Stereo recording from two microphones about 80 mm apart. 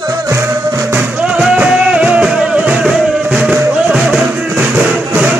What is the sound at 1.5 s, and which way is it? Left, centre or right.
Music, centre.